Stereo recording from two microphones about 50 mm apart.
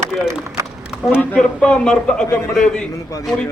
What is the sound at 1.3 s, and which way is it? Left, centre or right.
Speech, centre.